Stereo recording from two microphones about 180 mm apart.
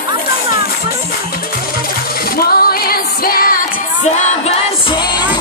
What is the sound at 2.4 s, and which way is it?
Singing, 55° left (ahead or behind).